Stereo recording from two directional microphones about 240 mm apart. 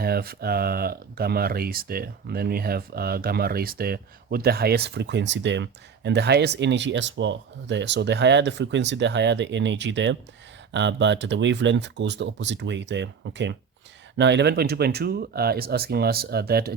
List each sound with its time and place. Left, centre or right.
0.0 s speech: right